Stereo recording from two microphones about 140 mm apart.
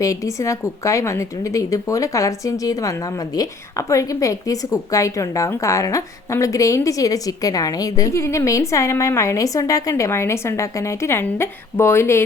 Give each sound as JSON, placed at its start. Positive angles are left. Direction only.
{"t": 0.0, "sound": "a woman's voice", "side_deg": 25}